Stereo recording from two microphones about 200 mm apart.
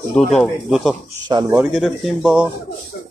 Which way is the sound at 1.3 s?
15° right (ahead or behind).